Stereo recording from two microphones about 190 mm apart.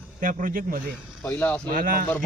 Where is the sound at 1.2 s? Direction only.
5° left (ahead or behind).